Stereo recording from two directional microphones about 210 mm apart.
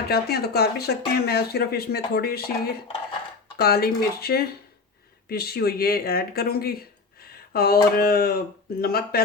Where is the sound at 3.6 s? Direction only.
45° left (ahead or behind).